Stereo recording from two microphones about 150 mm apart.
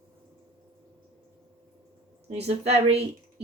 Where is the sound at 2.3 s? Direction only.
45° right (ahead or behind).